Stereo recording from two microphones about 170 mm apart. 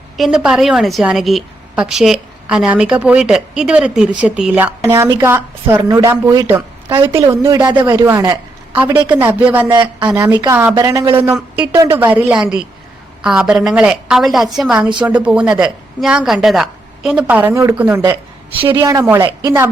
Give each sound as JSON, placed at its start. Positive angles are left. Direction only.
{"t": 0.2, "sound": "a woman's voice", "side_deg": -5}
{"t": 9.6, "sound": "speech", "side_deg": -25}
{"t": 11.2, "sound": "a woman's voice", "side_deg": -10}
{"t": 18.7, "sound": "speech", "side_deg": -20}